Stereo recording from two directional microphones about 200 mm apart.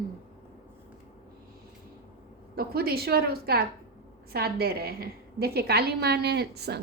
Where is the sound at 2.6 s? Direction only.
50° right (ahead or behind).